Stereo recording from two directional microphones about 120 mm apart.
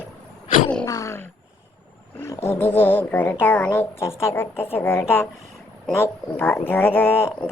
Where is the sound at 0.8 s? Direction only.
30° left (ahead or behind).